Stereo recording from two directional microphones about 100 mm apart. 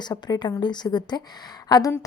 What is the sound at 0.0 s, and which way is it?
A woman's voice, 45° left (ahead or behind).